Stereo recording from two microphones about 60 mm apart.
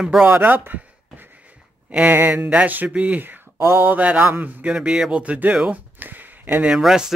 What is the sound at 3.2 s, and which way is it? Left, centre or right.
Speech, right.